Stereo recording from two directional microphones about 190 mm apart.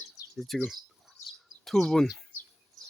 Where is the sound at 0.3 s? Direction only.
Centre (ahead or behind).